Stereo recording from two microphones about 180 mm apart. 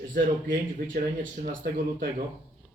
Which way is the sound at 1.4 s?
50° right (ahead or behind).